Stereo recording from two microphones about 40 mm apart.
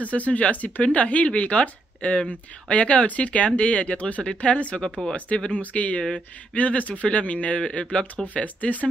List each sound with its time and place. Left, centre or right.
0.0 s speech: left